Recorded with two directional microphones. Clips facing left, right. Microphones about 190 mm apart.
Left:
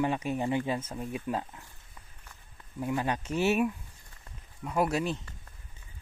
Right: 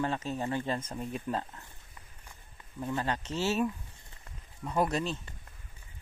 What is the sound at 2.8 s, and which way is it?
Speech, 10° left (ahead or behind).